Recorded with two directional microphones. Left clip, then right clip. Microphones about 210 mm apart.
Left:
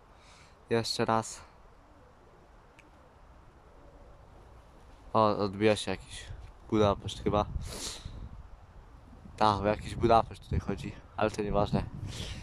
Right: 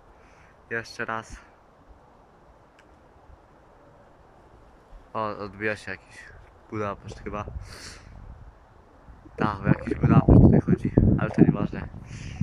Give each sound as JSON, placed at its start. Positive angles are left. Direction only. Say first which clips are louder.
{"t": 0.7, "sound": "speech", "louder": "left 2 dB", "side_deg": 15}
{"t": 5.1, "sound": "speech", "louder": "left 4 dB", "side_deg": 10}
{"t": 9.3, "sound": "speech", "louder": "left 1 dB", "side_deg": 15}